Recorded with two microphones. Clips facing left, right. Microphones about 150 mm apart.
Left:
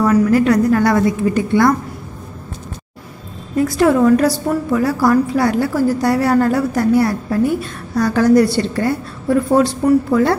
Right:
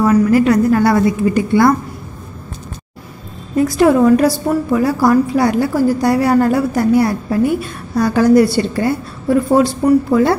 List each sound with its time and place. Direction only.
0.0 s a woman's voice: 5° right (ahead or behind)
3.5 s a woman's voice: 15° right (ahead or behind)